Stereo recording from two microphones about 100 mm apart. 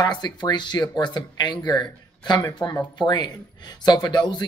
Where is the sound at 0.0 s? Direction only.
45° left (ahead or behind).